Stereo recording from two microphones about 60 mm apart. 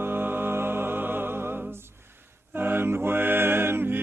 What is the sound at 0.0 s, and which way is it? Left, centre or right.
Music, right.